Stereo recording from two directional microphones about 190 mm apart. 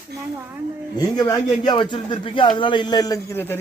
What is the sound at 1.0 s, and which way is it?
A man's voice, 20° left (ahead or behind).